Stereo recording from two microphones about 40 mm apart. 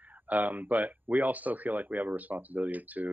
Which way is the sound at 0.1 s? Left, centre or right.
Right.